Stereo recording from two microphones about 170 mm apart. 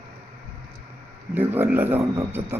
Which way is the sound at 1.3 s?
10° right (ahead or behind).